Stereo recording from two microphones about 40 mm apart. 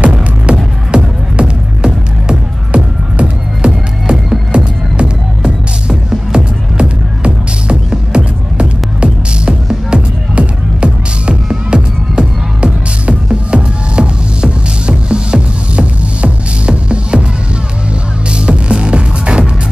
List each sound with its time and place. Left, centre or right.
0.5 s music: right
18.3 s music: right